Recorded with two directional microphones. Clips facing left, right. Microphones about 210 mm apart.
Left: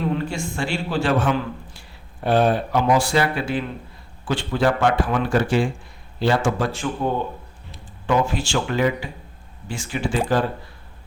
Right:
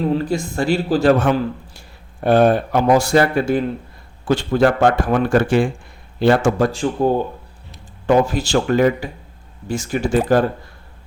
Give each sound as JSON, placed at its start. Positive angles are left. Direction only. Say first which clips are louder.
{"t": 0.1, "sound": "a man's voice", "louder": "right 5 dB", "side_deg": -40}
{"t": 6.7, "sound": "a man's voice", "louder": "right 6 dB", "side_deg": -35}